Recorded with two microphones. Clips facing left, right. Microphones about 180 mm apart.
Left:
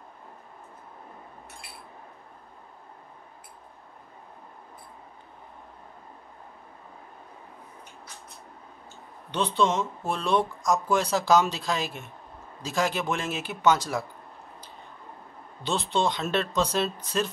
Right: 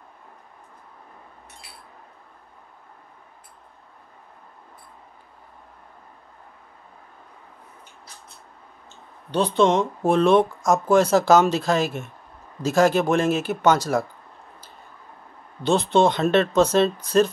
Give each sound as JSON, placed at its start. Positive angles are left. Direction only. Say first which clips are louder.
{"t": 9.6, "sound": "speech", "louder": "right 7 dB", "side_deg": -55}
{"t": 10.6, "sound": "speech", "louder": "right 7 dB", "side_deg": -50}
{"t": 15.6, "sound": "speech", "louder": "right 8 dB", "side_deg": -50}